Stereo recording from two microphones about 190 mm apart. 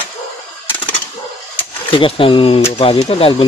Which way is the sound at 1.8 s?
30° left (ahead or behind).